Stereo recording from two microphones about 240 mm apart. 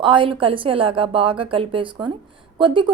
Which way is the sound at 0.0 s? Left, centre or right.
Right.